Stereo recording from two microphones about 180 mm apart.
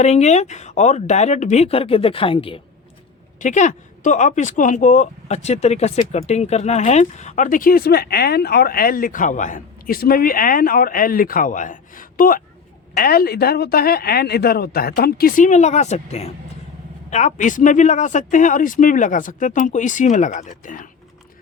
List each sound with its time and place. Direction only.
0.0 s speech: 40° left (ahead or behind)
3.4 s a woman's voice: 40° left (ahead or behind)